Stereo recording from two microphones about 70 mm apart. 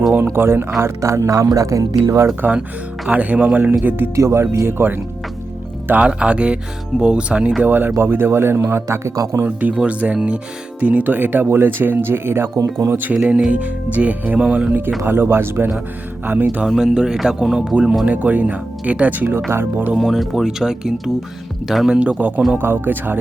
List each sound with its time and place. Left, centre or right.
0.3 s speech: right
3.1 s speech: right
4.1 s speech: right
5.9 s speech: centre
7.6 s speech: right
9.4 s speech: right
15.0 s speech: right
16.6 s speech: centre
18.0 s speech: right
20.0 s speech: centre
22.6 s speech: right